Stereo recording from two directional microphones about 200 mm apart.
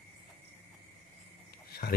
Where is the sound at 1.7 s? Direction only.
50° left (ahead or behind).